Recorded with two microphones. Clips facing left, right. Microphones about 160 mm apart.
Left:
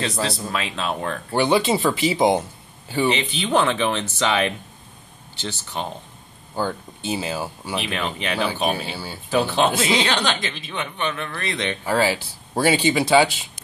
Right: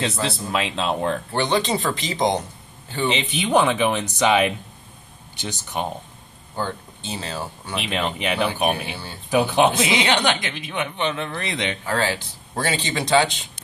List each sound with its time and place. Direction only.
0.5 s speech: 20° right (ahead or behind)
1.3 s speech: 10° left (ahead or behind)
3.1 s speech: 20° right (ahead or behind)
6.5 s speech: 10° left (ahead or behind)
7.7 s speech: 20° right (ahead or behind)
8.9 s speech: 5° left (ahead or behind)
9.3 s speech: 15° right (ahead or behind)
11.8 s speech: 10° left (ahead or behind)